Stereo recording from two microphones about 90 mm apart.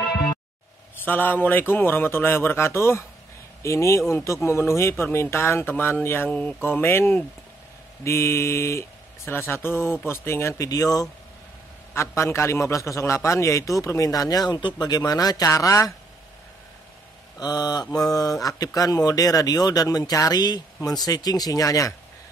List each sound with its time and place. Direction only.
1.0 s a man's voice: 20° left (ahead or behind)
10.6 s a man's voice: 40° left (ahead or behind)
12.2 s a man's voice: 30° left (ahead or behind)
17.4 s a man's voice: 45° left (ahead or behind)